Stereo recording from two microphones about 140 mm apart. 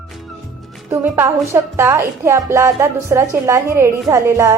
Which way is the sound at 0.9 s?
20° right (ahead or behind).